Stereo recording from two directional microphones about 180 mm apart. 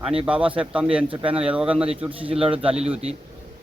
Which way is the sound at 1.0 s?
30° right (ahead or behind).